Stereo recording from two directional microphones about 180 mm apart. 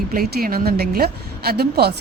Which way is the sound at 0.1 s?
55° right (ahead or behind).